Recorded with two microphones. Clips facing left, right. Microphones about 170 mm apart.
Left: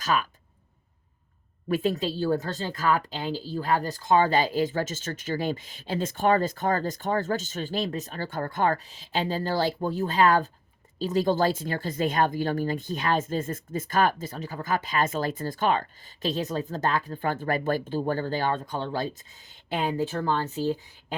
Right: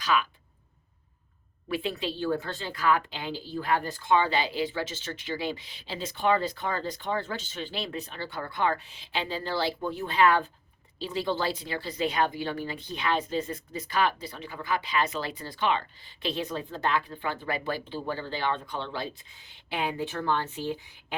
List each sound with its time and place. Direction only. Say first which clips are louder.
0.0 s speech: left 1 dB; 45° left (ahead or behind)
1.7 s speech: left 5 dB; 45° left (ahead or behind)